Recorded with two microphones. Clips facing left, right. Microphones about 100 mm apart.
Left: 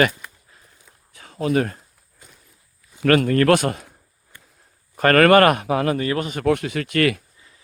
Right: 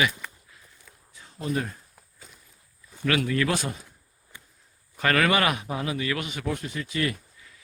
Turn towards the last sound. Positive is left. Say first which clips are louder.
# even
turn(degrees=30)  # may be behind; listen again after turning